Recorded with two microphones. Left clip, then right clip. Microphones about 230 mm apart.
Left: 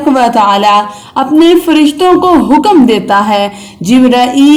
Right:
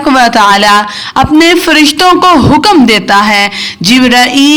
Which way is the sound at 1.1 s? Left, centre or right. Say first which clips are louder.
Right 1 dB; right.